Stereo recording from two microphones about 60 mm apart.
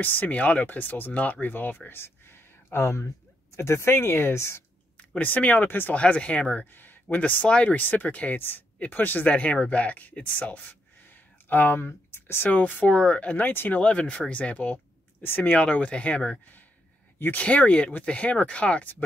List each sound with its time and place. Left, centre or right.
0.0 s speech: left
0.7 s speech: left
4.9 s speech: left
5.9 s speech: left
7.4 s speech: centre
7.7 s speech: left
12.4 s speech: left
15.2 s speech: left
15.5 s speech: centre